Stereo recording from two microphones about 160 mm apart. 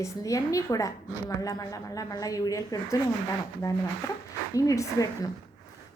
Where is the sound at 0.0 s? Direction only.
20° left (ahead or behind).